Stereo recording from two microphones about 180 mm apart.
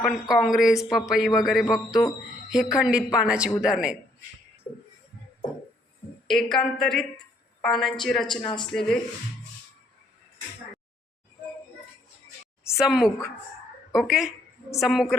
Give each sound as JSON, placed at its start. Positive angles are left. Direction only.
{"t": 0.0, "sound": "a woman's voice", "side_deg": 0}
{"t": 6.2, "sound": "a woman's voice", "side_deg": 0}
{"t": 8.4, "sound": "speech", "side_deg": 25}
{"t": 8.7, "sound": "a woman's voice", "side_deg": 0}
{"t": 12.7, "sound": "a woman's voice", "side_deg": 0}